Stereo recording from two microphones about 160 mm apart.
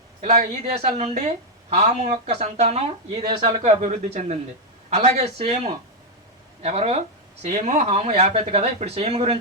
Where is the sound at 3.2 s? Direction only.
25° right (ahead or behind).